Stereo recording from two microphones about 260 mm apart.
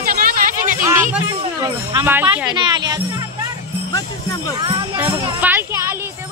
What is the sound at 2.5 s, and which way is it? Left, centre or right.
Speech, centre.